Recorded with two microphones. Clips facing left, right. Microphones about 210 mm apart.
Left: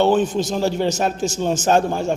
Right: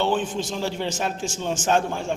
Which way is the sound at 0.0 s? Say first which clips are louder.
Left 7 dB; 40° left (ahead or behind).